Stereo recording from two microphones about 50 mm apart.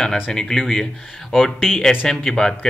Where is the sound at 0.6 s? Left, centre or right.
Centre.